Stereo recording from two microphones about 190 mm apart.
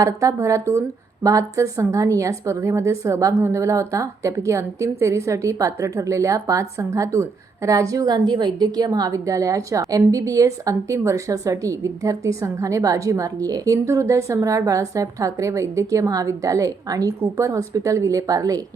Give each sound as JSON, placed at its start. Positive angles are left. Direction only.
{"t": 0.0, "sound": "a woman's voice", "side_deg": -15}